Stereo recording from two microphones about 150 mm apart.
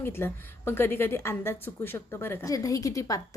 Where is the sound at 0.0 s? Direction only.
15° left (ahead or behind).